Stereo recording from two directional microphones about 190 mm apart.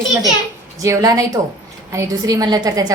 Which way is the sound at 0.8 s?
15° right (ahead or behind).